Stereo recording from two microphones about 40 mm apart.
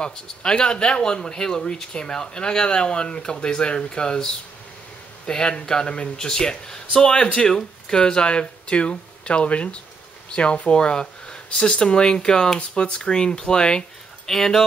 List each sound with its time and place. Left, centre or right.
0.0 s speech: left
8.0 s speech: left